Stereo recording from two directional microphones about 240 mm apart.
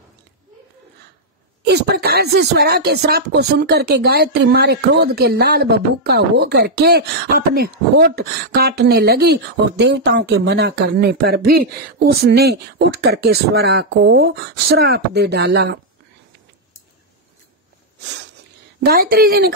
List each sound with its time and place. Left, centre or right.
1.6 s speech: right
18.8 s speech: right